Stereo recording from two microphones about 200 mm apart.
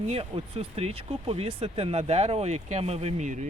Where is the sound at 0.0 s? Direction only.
30° right (ahead or behind).